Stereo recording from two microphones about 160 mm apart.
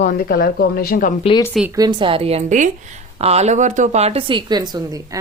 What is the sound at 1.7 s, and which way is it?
A woman's voice, 25° right (ahead or behind).